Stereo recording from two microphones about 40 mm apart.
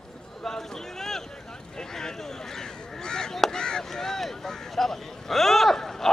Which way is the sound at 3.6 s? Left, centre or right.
Centre.